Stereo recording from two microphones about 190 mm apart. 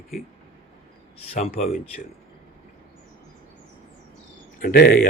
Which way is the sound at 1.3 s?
35° left (ahead or behind).